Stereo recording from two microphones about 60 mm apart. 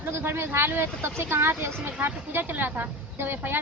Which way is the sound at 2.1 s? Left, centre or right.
Right.